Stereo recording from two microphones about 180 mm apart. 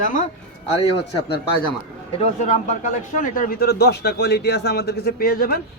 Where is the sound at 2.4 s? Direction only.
40° left (ahead or behind).